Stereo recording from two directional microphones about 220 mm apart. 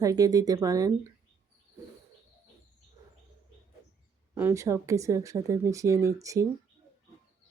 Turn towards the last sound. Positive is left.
turn(degrees=-15)  # may be behind; listen again after turning